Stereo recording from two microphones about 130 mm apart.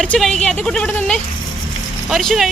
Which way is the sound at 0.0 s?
5° left (ahead or behind).